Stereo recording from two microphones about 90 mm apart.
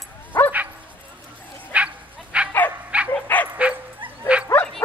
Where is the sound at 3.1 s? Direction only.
20° left (ahead or behind).